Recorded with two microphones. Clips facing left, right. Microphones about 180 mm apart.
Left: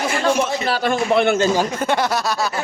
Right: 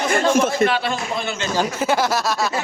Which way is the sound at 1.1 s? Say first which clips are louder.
Left 10 dB; 65° left (ahead or behind).